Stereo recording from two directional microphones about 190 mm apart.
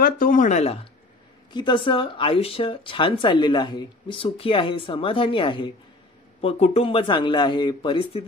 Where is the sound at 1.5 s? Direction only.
25° left (ahead or behind).